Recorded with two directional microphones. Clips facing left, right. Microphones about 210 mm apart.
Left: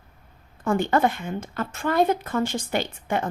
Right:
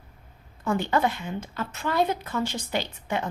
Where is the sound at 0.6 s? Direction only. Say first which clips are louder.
Left 3 dB; 50° left (ahead or behind).